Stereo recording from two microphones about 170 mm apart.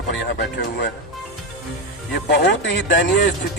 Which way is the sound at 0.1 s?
90° left.